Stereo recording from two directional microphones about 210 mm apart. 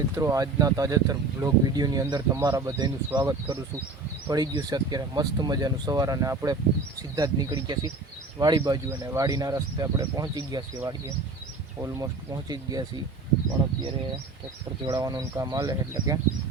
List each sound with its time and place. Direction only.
0.2 s speech: 15° right (ahead or behind)
14.8 s speech: 15° right (ahead or behind)